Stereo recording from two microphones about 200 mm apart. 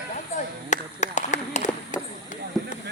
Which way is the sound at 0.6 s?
35° left (ahead or behind).